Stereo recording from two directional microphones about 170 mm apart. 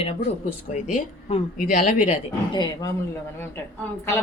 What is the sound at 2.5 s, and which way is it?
Speech, 25° left (ahead or behind).